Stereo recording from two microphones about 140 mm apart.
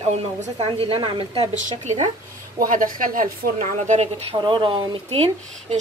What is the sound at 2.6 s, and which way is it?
A woman's voice, 75° right (ahead or behind).